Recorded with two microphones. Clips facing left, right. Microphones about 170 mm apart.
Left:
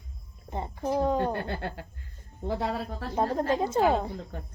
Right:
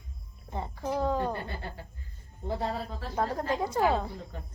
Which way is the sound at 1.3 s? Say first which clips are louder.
Left 4 dB; 65° left (ahead or behind).